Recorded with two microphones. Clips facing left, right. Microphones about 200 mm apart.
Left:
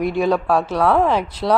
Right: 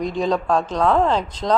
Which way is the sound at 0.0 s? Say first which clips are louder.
Left 3 dB; 10° left (ahead or behind).